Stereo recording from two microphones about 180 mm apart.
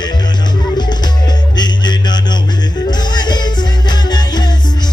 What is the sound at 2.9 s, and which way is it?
Music, 25° left (ahead or behind).